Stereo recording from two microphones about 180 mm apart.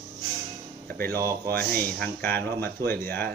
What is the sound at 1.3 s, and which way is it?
Speech, 10° left (ahead or behind).